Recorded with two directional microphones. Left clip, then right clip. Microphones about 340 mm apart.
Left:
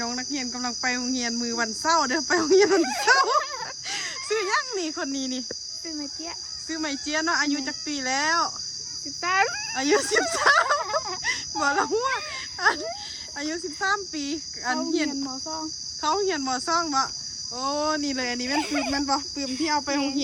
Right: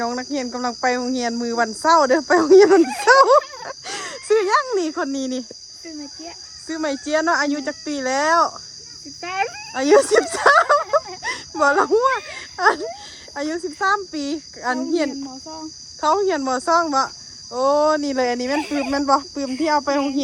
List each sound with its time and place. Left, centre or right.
0.0 s cricket: centre
0.3 s speech: centre
3.8 s a sound: centre
4.8 s speech: centre
6.7 s speech: centre